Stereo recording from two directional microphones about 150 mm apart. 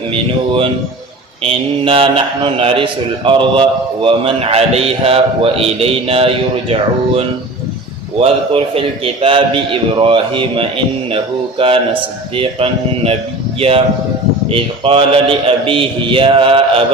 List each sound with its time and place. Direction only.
0.1 s a man's voice: 35° right (ahead or behind)